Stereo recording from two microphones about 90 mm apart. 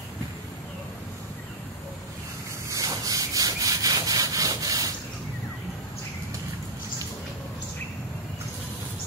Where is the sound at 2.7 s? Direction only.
40° right (ahead or behind).